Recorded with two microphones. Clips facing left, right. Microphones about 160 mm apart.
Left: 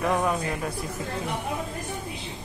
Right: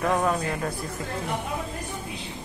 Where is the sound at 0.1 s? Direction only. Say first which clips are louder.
Right 2 dB; centre (ahead or behind).